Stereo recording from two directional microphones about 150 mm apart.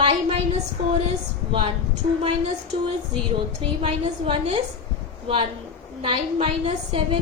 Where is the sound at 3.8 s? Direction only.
35° right (ahead or behind).